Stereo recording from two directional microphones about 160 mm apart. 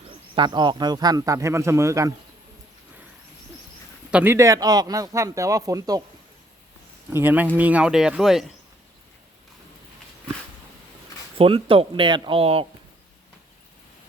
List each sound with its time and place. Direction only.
0.3 s speech: 30° right (ahead or behind)
4.1 s speech: 15° right (ahead or behind)
7.1 s speech: 10° right (ahead or behind)
11.3 s speech: 35° right (ahead or behind)